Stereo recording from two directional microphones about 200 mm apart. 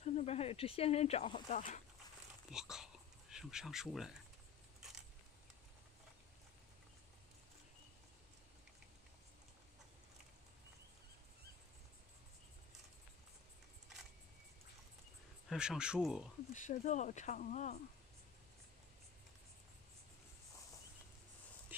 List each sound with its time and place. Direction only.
0.0 s speech: 35° left (ahead or behind)
2.5 s speech: 5° right (ahead or behind)
15.5 s speech: 5° right (ahead or behind)
16.5 s speech: 40° left (ahead or behind)